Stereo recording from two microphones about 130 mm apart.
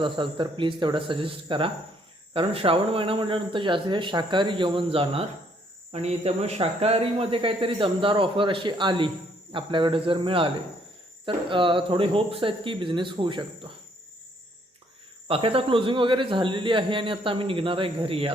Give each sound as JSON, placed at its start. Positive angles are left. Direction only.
{"t": 0.0, "sound": "speech", "side_deg": -40}
{"t": 5.9, "sound": "a man's voice", "side_deg": -55}
{"t": 15.3, "sound": "speech", "side_deg": -45}